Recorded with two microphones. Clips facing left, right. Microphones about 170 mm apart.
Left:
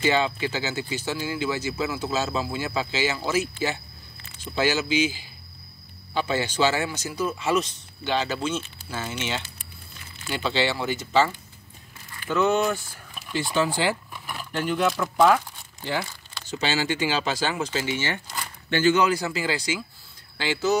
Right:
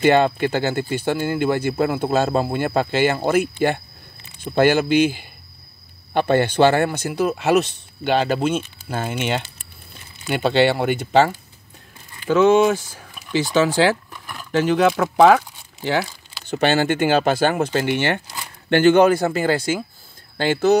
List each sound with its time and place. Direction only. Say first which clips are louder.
0.0 s speech: right 8 dB; 55° right (ahead or behind)
12.3 s speech: right 8 dB; 90° right
16.4 s speech: right 8 dB; 60° right (ahead or behind)